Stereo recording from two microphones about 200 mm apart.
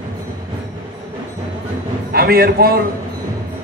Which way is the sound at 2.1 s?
50° right (ahead or behind).